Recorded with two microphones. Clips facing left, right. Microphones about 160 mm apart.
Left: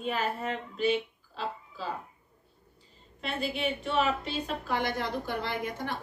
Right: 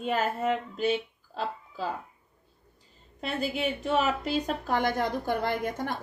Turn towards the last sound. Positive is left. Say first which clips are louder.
# right 4 dB
turn(degrees=-50)  # may be behind; listen again after turning